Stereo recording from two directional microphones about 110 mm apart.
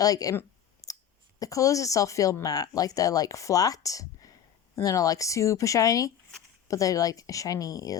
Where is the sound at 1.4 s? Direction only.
30° left (ahead or behind).